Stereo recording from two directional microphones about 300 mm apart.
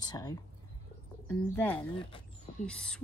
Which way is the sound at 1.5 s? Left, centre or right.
Centre.